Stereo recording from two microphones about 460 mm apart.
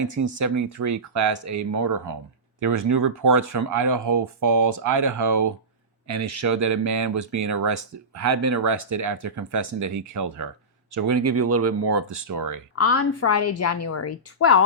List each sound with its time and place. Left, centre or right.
0.0 s speech: right
12.7 s a woman's voice: left